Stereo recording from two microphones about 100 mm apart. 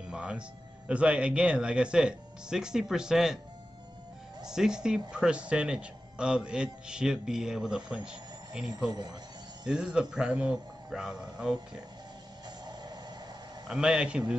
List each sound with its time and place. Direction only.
0.0 s speech: 10° right (ahead or behind)
4.5 s speech: 5° right (ahead or behind)
12.4 s music: 45° right (ahead or behind)
13.7 s speech: 5° right (ahead or behind)